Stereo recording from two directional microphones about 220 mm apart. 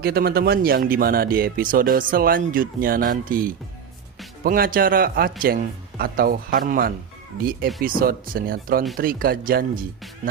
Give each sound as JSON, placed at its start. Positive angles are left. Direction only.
{"t": 0.0, "sound": "speech", "side_deg": -45}